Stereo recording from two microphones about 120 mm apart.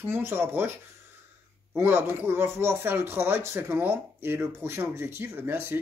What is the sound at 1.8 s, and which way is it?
Speech, 15° right (ahead or behind).